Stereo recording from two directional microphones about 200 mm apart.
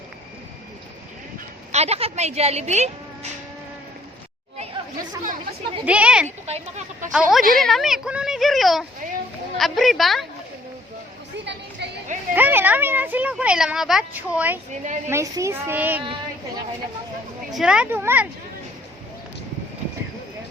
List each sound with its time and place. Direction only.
1.7 s a woman's voice: 30° right (ahead or behind)
5.8 s speech: 5° right (ahead or behind)
6.2 s a woman's voice: 35° right (ahead or behind)
7.1 s speech: centre (ahead or behind)
11.8 s a sound: 60° right (ahead or behind)
12.3 s speech: 10° right (ahead or behind)
14.7 s a woman's voice: 35° right (ahead or behind)
15.1 s speech: 15° right (ahead or behind)
17.5 s speech: 5° right (ahead or behind)